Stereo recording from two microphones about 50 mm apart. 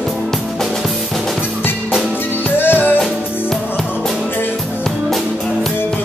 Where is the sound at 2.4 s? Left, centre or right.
Left.